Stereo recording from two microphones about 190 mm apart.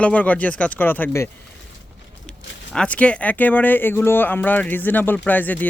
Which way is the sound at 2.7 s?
5° left (ahead or behind).